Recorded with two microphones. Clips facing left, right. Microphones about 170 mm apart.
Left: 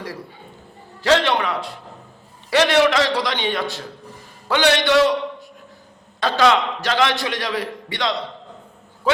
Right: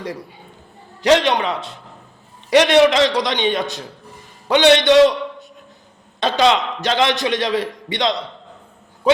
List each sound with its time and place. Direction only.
0.0 s a man's voice: 20° right (ahead or behind)